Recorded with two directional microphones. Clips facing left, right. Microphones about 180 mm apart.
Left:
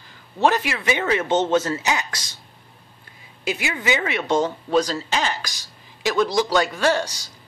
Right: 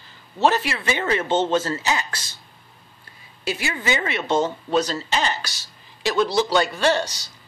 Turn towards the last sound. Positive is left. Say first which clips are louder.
# even
turn(degrees=10)  # may be behind; listen again after turning